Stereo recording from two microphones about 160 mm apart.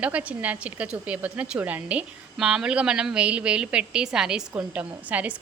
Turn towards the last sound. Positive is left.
turn(degrees=-10)  # may be behind; listen again after turning